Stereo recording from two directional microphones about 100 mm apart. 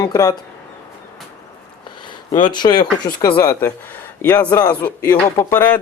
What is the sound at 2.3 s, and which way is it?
A man's voice, 45° left (ahead or behind).